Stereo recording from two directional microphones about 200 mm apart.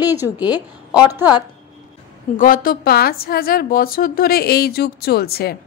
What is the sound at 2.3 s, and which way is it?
A woman's voice, 45° left (ahead or behind).